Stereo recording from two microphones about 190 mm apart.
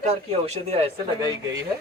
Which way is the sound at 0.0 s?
35° right (ahead or behind).